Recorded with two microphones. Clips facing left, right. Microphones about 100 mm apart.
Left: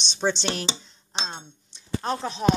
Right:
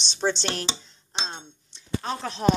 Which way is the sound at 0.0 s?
5° right (ahead or behind).